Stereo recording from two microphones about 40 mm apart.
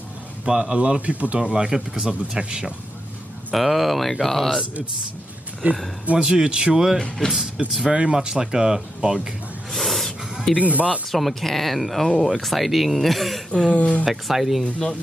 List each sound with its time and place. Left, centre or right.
0.5 s a man's voice: right
1.4 s speech: right
3.5 s speech: centre
5.6 s speech: right
6.1 s speech: right
7.0 s speech: centre
7.6 s a man's voice: right
9.7 s a sound: centre
10.5 s a man's voice: right
11.1 s speech: centre
13.7 s speech: left
14.0 s speech: centre
14.6 s speech: centre